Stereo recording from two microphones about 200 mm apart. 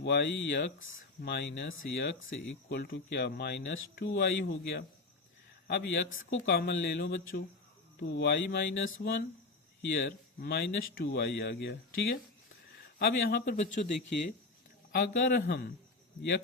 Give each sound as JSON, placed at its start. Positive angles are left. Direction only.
{"t": 0.0, "sound": "speech", "side_deg": 60}
{"t": 1.2, "sound": "speech", "side_deg": 55}
{"t": 14.9, "sound": "speech", "side_deg": 60}